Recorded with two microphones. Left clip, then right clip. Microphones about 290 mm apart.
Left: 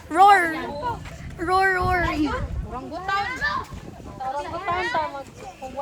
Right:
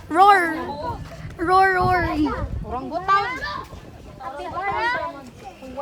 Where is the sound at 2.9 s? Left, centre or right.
Right.